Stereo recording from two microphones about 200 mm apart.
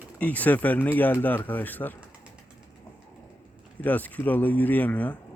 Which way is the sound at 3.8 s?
10° left (ahead or behind).